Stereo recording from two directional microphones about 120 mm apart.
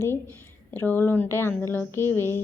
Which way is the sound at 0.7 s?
15° left (ahead or behind).